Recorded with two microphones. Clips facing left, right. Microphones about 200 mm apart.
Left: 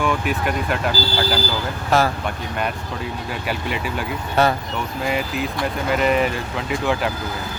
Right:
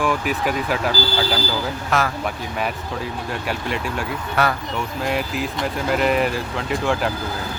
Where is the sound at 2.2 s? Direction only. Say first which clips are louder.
Even; centre (ahead or behind).